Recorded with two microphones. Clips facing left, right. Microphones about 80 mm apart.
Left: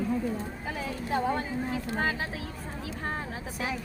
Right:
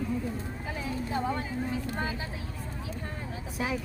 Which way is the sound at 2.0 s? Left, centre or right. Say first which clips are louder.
Left 4 dB; left.